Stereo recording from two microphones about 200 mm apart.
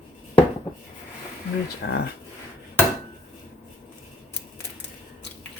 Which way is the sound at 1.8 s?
55° left (ahead or behind).